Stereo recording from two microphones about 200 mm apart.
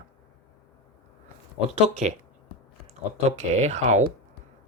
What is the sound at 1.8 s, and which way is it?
Speech, 35° right (ahead or behind).